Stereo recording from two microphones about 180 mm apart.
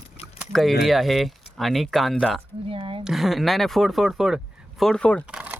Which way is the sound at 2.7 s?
30° right (ahead or behind).